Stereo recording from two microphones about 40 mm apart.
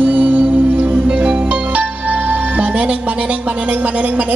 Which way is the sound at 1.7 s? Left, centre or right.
Right.